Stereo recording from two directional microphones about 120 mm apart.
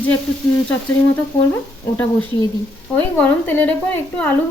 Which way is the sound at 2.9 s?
15° left (ahead or behind).